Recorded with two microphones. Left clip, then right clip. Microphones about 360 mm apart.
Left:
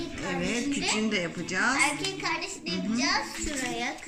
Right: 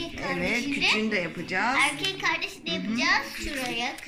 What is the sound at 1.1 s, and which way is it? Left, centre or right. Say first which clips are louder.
Speech: right 2 dB; centre.